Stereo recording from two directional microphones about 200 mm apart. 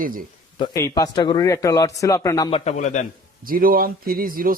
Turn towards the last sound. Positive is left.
turn(degrees=-45)  # may be behind; listen again after turning